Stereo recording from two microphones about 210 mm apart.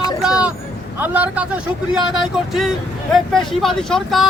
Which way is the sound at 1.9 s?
Centre (ahead or behind).